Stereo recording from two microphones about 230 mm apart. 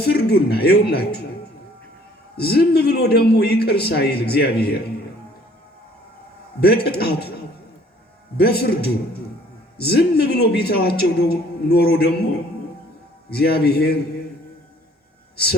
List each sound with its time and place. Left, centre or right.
0.0 s a man's voice: left
2.3 s a man's voice: left
6.6 s a man's voice: left
8.4 s a man's voice: left
13.3 s a man's voice: left